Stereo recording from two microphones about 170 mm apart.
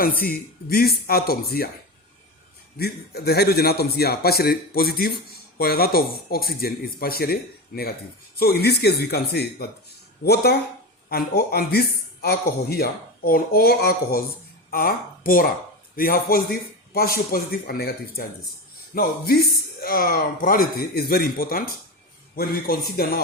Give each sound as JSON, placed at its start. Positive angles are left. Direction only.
{"t": 0.2, "sound": "speech", "side_deg": 60}
{"t": 2.7, "sound": "a man's voice", "side_deg": 70}
{"t": 8.4, "sound": "a man's voice", "side_deg": 65}